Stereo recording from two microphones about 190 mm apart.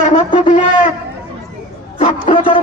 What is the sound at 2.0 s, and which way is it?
Shofar, 30° left (ahead or behind).